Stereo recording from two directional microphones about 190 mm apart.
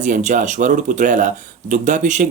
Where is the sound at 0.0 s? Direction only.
40° right (ahead or behind).